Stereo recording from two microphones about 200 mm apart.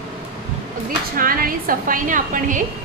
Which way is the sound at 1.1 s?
45° right (ahead or behind).